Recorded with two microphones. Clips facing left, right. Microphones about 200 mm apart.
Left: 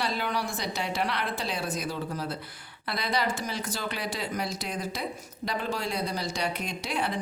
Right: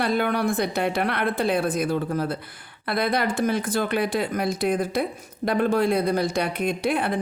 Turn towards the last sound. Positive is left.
turn(degrees=-55)  # may be behind; listen again after turning